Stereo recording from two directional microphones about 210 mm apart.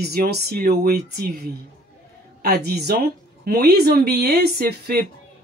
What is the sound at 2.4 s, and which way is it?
Speech, 50° right (ahead or behind).